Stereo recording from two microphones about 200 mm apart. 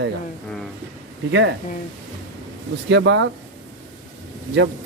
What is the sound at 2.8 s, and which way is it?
Speech, 70° right (ahead or behind).